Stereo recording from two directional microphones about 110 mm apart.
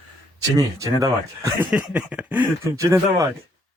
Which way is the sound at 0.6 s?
30° right (ahead or behind).